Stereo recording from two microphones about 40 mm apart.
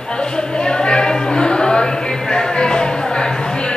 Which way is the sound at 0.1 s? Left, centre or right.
Left.